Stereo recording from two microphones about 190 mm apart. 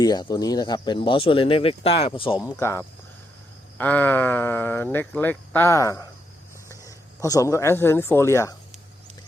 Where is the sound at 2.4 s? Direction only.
15° left (ahead or behind).